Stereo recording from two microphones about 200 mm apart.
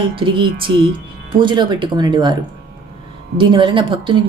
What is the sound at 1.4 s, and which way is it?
Speech, 25° right (ahead or behind).